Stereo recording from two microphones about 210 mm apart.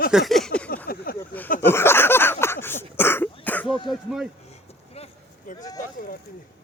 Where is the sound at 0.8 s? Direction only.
45° left (ahead or behind).